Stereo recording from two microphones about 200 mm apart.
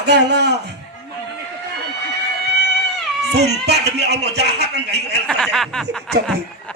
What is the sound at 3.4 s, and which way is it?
A man's voice, 55° right (ahead or behind).